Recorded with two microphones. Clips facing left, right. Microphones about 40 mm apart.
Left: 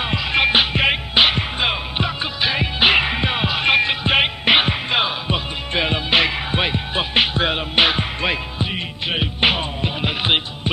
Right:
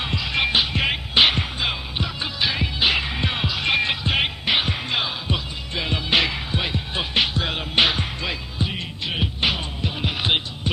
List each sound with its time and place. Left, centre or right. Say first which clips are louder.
0.0 s music: left 5 dB; left
1.1 s music: even; centre
1.6 s music: left 5 dB; left
3.2 s music: left 4 dB; left
6.5 s music: left 5 dB; left
7.7 s music: left 1 dB; centre
8.2 s music: left 5 dB; left